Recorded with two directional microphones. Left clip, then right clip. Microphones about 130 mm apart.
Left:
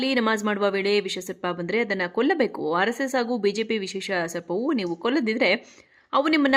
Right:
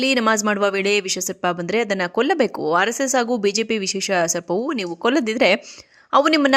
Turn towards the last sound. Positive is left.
turn(degrees=-45)  # may be behind; listen again after turning